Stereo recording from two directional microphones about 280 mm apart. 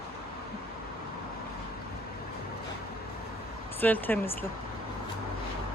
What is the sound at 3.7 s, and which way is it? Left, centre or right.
Speech, centre.